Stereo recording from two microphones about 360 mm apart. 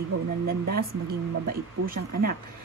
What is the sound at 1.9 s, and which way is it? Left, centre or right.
Speech, right.